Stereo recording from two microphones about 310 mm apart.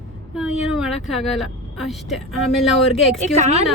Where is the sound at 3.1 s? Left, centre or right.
Right.